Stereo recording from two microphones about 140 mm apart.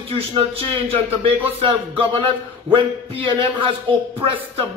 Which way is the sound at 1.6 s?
40° right (ahead or behind).